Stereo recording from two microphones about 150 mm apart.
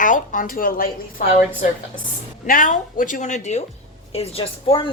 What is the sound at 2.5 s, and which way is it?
A woman's voice, 65° left (ahead or behind).